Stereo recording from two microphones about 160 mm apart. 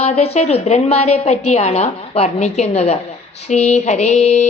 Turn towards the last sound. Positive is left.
turn(degrees=45)  # may be behind; listen again after turning